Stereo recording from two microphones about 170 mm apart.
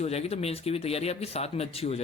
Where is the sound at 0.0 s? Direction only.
40° left (ahead or behind).